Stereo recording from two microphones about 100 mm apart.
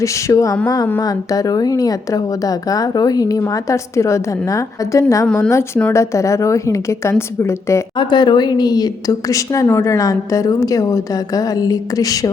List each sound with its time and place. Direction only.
0.0 s a woman's voice: 30° left (ahead or behind)
5.2 s speech: 15° left (ahead or behind)
5.5 s a woman's voice: 30° left (ahead or behind)
7.9 s a woman's voice: 45° left (ahead or behind)